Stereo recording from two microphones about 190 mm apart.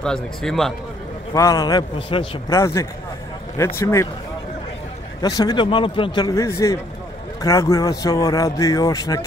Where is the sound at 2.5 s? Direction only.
15° left (ahead or behind).